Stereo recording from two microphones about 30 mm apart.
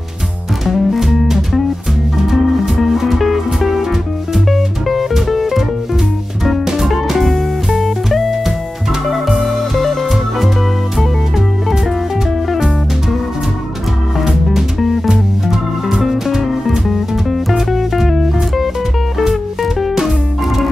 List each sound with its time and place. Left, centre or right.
0.7 s music: centre
6.9 s music: centre
11.0 s music: centre
14.2 s music: centre